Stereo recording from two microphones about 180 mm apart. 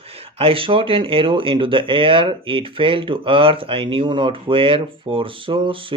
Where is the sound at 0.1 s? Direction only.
30° right (ahead or behind).